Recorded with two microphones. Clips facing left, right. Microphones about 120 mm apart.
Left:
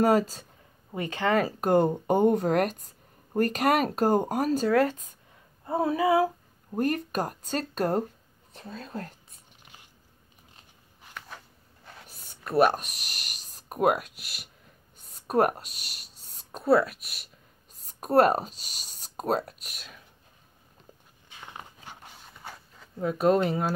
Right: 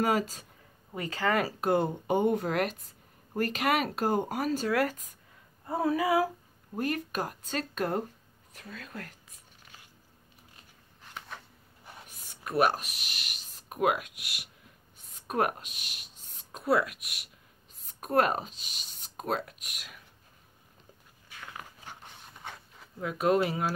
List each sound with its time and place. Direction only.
0.0 s speech: 35° left (ahead or behind)
0.9 s speech: 25° left (ahead or behind)
1.4 s speech: 40° left (ahead or behind)
4.6 s speech: 25° left (ahead or behind)
5.7 s a sound: 25° left (ahead or behind)
6.8 s speech: 45° left (ahead or behind)
12.1 s speech: 40° left (ahead or behind)
21.3 s a sound: 20° left (ahead or behind)
22.0 s a sound: 5° left (ahead or behind)
22.9 s speech: 35° left (ahead or behind)